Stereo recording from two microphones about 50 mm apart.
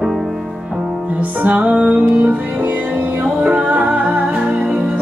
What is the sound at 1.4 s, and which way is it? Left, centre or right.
Music, right.